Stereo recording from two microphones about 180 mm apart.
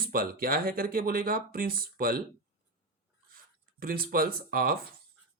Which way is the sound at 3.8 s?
55° right (ahead or behind).